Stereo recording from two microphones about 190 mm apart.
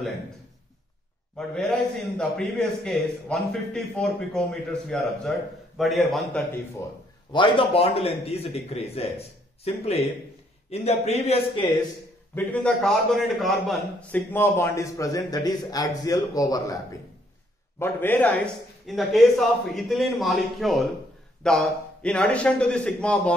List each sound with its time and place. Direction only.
1.3 s a man's voice: 5° left (ahead or behind)
7.3 s a man's voice: 30° left (ahead or behind)
12.4 s a man's voice: 5° left (ahead or behind)
14.1 s a man's voice: 10° left (ahead or behind)